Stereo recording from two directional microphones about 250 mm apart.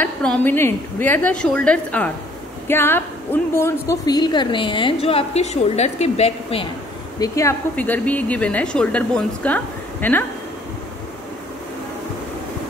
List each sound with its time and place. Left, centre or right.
0.0 s a woman's voice: centre; by 6.7 s left
7.2 s a woman's voice: centre